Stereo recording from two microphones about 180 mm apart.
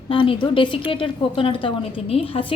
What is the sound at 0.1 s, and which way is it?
A woman's voice, 30° left (ahead or behind).